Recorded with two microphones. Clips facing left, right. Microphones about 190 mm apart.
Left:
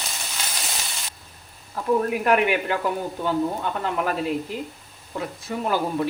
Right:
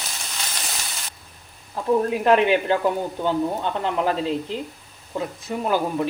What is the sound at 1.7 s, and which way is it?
Speech, 25° right (ahead or behind).